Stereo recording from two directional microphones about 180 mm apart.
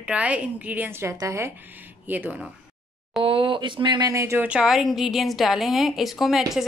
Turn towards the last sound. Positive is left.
turn(degrees=0)  # may be behind; listen again after turning